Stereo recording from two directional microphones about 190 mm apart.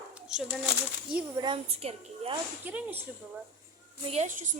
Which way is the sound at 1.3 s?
25° right (ahead or behind).